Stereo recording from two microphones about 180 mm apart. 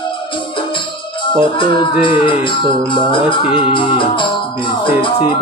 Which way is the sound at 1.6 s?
30° left (ahead or behind).